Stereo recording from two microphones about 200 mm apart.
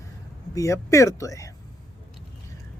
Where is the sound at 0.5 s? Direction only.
15° left (ahead or behind).